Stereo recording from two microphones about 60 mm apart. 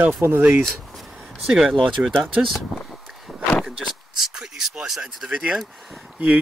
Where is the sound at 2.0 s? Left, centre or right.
Right.